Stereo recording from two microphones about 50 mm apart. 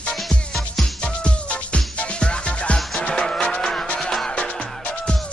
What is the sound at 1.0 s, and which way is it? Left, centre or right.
Music, left.